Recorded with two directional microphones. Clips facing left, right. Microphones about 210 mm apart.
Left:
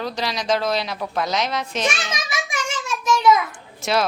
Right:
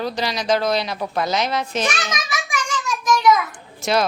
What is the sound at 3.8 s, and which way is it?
Speech, centre (ahead or behind).